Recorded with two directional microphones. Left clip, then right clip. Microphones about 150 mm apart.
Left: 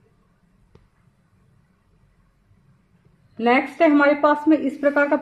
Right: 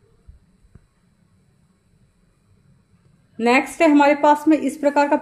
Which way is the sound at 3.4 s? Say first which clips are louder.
Right 1 dB; 15° right (ahead or behind).